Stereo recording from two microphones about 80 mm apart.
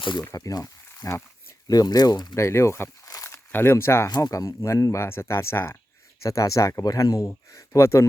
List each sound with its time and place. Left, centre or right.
0.3 s speech: left
1.6 s speech: left
2.3 s speech: left
4.1 s speech: left